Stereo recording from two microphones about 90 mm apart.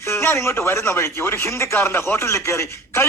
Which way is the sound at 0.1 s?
30° left (ahead or behind).